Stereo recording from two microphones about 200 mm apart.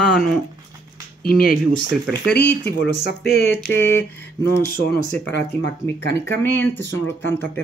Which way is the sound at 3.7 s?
10° left (ahead or behind).